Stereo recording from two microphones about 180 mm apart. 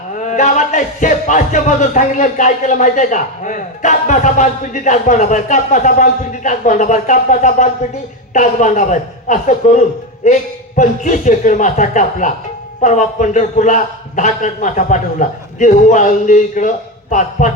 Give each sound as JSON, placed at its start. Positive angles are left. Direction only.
{"t": 0.3, "sound": "speech", "side_deg": 40}